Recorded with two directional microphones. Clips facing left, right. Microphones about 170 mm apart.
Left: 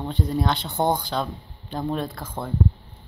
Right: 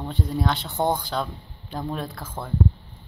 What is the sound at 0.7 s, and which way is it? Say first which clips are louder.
Speech: left 1 dB; 15° left (ahead or behind).